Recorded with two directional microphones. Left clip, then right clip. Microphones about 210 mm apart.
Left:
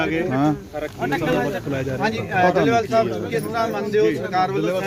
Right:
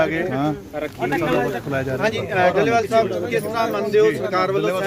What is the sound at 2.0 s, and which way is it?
Speech, 40° right (ahead or behind).